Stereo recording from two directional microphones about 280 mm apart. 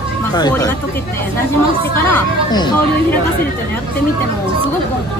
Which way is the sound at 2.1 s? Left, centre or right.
Centre.